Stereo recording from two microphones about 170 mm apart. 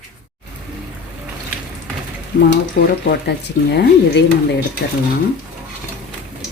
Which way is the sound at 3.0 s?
75° left (ahead or behind).